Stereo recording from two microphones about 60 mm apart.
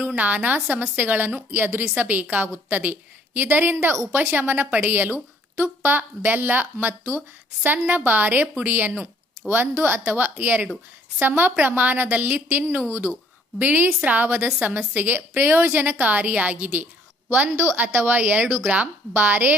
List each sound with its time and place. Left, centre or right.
0.0 s a woman's voice: right
7.6 s a woman's voice: right
13.6 s a woman's voice: right
17.7 s a woman's voice: right